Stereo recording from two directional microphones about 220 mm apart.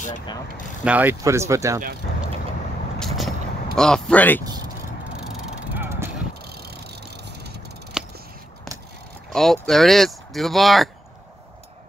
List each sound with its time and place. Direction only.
0.8 s speech: 10° right (ahead or behind)
3.0 s vehicle: centre (ahead or behind)
5.8 s vehicle: 10° right (ahead or behind)
6.5 s vehicle: 45° right (ahead or behind)
8.0 s scissors: centre (ahead or behind)
9.3 s speech: centre (ahead or behind)